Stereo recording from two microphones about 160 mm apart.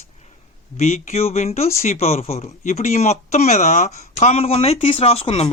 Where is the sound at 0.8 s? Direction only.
45° left (ahead or behind).